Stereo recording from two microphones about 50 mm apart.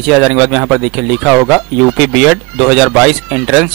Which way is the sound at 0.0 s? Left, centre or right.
Centre.